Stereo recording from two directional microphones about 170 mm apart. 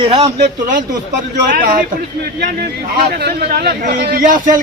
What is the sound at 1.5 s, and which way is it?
Speech, 55° right (ahead or behind).